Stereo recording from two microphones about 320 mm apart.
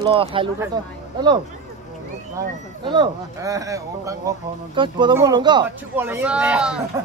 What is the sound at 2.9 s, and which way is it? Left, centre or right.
Speech, centre.